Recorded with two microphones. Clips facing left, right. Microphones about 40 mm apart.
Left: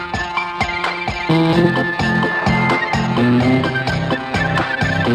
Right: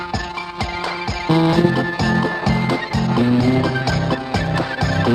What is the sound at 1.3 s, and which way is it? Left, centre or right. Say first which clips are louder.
Music: left 1 dB; left.